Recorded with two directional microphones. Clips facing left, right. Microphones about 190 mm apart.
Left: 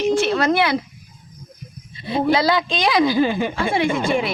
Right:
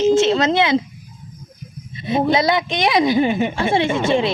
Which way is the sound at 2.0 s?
20° right (ahead or behind).